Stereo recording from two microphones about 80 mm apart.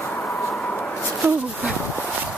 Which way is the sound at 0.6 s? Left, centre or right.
Centre.